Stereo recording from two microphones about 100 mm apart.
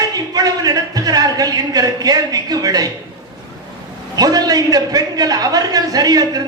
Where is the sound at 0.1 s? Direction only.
40° right (ahead or behind).